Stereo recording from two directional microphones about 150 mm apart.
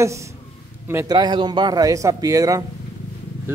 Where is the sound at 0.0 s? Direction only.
20° right (ahead or behind).